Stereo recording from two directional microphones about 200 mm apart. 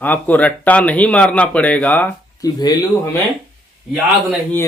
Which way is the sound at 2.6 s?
20° left (ahead or behind).